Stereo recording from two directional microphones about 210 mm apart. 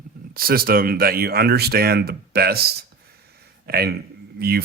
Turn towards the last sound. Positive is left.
turn(degrees=-50)  # may be behind; listen again after turning